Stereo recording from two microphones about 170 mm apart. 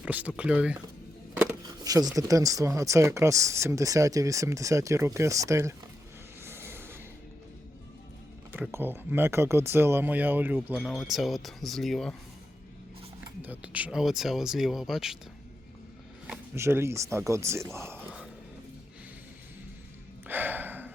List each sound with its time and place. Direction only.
0.0 s speech: 10° right (ahead or behind)
1.6 s speech: 20° right (ahead or behind)
6.4 s a sound: 15° right (ahead or behind)
8.5 s speech: 10° right (ahead or behind)
13.4 s speech: 10° right (ahead or behind)
16.2 s speech: 10° right (ahead or behind)
20.2 s gasp: 10° right (ahead or behind)